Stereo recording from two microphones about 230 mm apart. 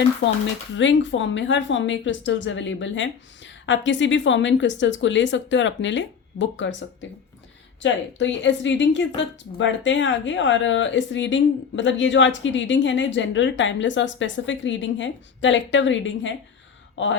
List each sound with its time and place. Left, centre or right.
0.2 s a woman's voice: left